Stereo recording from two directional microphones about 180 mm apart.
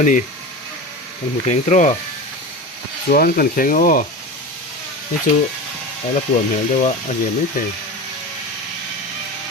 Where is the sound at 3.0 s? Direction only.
55° left (ahead or behind).